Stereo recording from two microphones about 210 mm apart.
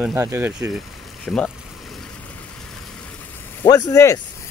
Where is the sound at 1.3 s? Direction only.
5° left (ahead or behind).